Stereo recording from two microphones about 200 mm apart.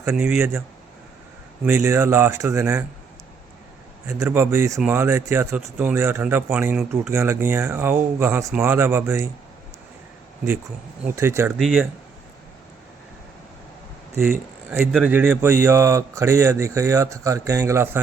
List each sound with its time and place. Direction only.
0.0 s a man's voice: 10° right (ahead or behind)
1.6 s a man's voice: 10° right (ahead or behind)
4.0 s a man's voice: 15° right (ahead or behind)
11.2 s a man's voice: 10° right (ahead or behind)
11.6 s speech: centre (ahead or behind)
14.3 s a man's voice: 10° right (ahead or behind)